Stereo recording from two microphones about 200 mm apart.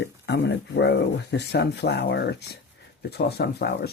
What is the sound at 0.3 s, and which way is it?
Speech, 60° left (ahead or behind).